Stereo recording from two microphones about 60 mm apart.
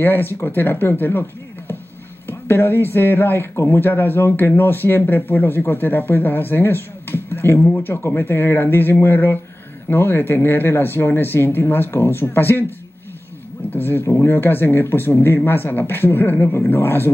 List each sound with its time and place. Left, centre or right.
0.0 s speech: left
13.7 s speech: left